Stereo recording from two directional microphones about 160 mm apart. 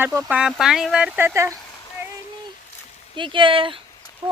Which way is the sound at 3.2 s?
30° right (ahead or behind).